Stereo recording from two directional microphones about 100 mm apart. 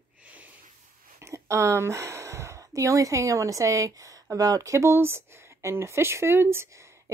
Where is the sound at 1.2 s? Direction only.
30° right (ahead or behind).